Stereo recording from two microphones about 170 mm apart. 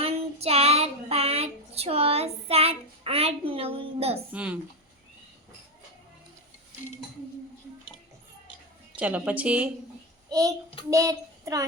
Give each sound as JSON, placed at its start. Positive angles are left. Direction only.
{"t": 0.0, "sound": "child singing", "side_deg": -35}
{"t": 4.3, "sound": "a woman's voice", "side_deg": -10}
{"t": 9.0, "sound": "a woman's voice", "side_deg": -10}
{"t": 10.2, "sound": "a child's voice", "side_deg": -20}